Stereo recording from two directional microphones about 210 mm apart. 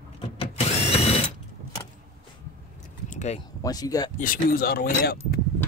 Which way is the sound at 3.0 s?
35° left (ahead or behind).